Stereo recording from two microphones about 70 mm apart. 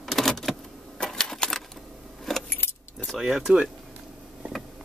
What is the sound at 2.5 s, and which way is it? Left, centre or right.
Keys jangling, left.